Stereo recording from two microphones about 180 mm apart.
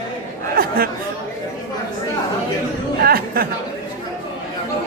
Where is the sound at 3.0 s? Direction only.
55° right (ahead or behind).